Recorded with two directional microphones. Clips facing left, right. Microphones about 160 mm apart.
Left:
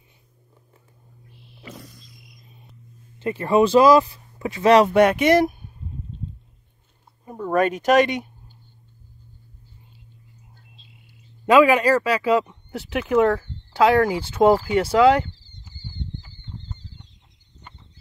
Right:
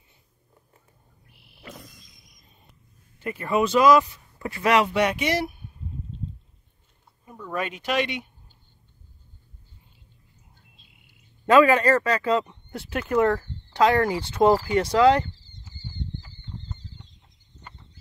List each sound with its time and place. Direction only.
1.6 s music: 10° left (ahead or behind)
3.2 s speech: 25° left (ahead or behind)
4.4 s speech: 20° left (ahead or behind)
4.6 s speech: 35° left (ahead or behind)
4.9 s speech: 50° left (ahead or behind)
7.2 s speech: 45° left (ahead or behind)
11.4 s speech: 10° left (ahead or behind)